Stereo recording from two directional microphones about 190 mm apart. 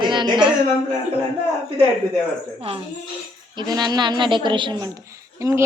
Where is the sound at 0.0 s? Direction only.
25° right (ahead or behind).